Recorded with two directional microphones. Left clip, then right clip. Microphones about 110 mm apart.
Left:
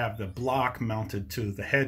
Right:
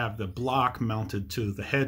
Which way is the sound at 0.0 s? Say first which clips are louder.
Even; 10° right (ahead or behind).